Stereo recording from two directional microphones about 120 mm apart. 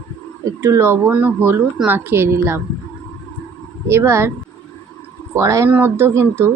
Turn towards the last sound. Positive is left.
turn(degrees=-20)  # may be behind; listen again after turning